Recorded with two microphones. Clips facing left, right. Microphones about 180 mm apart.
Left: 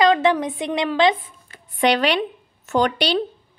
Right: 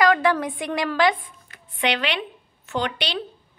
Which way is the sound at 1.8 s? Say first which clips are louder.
Left 6 dB; 40° left (ahead or behind).